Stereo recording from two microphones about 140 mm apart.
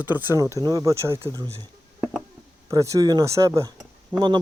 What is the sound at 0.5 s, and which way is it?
Speech, 25° right (ahead or behind).